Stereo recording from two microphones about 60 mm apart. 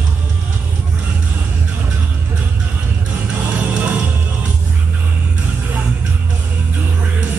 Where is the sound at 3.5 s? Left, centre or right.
Right.